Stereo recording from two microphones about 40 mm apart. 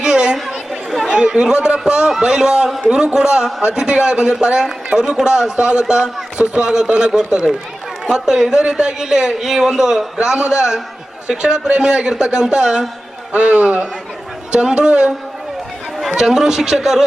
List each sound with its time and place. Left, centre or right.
0.0 s chatter: right
0.3 s chatter: centre
1.0 s chatter: centre
1.9 s a man's voice: right
8.3 s a man's voice: centre
13.3 s a man's voice: right
16.1 s a man's voice: centre